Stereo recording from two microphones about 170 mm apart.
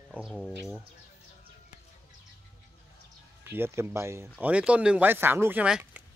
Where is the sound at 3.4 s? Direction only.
15° right (ahead or behind).